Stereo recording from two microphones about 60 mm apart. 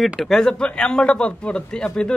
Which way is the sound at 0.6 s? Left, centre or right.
Centre.